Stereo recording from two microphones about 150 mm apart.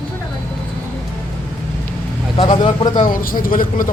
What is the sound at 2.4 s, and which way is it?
Speech, 35° left (ahead or behind).